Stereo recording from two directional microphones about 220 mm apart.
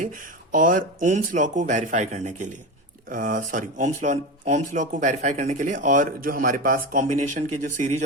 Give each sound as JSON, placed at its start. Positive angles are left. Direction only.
{"t": 0.0, "sound": "speech", "side_deg": -35}